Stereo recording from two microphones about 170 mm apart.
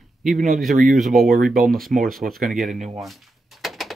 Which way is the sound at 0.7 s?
50° right (ahead or behind).